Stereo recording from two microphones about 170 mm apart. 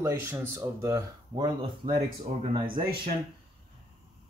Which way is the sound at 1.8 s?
35° right (ahead or behind).